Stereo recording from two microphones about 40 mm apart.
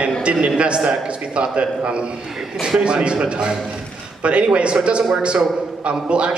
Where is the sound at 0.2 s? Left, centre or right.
Right.